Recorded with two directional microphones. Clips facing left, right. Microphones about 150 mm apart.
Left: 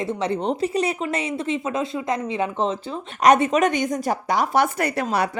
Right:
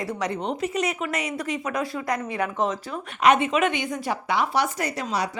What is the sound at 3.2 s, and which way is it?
A woman's voice, 40° left (ahead or behind).